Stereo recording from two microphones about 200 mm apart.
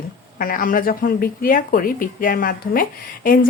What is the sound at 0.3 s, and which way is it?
A woman's voice, 45° left (ahead or behind).